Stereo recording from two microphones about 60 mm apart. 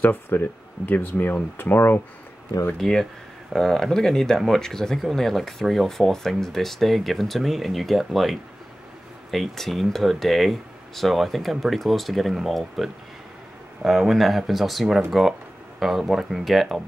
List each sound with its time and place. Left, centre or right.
0.0 s speech: left
2.8 s speech: centre